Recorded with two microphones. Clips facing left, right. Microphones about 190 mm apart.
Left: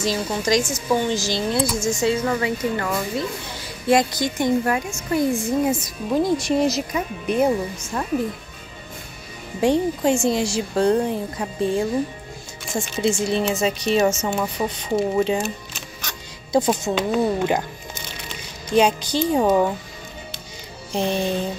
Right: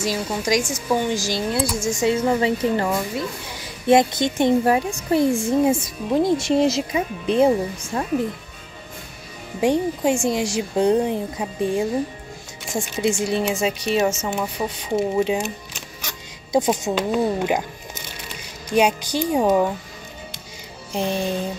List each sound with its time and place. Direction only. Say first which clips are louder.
0.0 s speech: left 1 dB; 10° right (ahead or behind)
2.1 s a child's voice: right 3 dB; 25° right (ahead or behind)
2.9 s a child's voice: even; 15° right (ahead or behind)
9.6 s speech: left 1 dB; 15° right (ahead or behind)
18.7 s speech: left 1 dB; 10° right (ahead or behind)
20.9 s speech: left 1 dB; 5° right (ahead or behind)